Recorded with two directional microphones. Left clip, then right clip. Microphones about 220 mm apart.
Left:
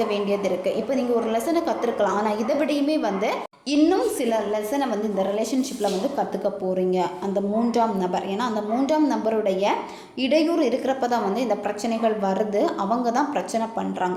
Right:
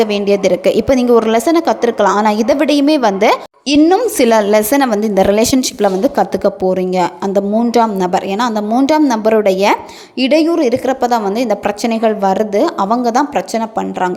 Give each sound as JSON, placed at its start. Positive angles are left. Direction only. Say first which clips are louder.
{"t": 0.0, "sound": "a woman's voice", "louder": "right 11 dB", "side_deg": -45}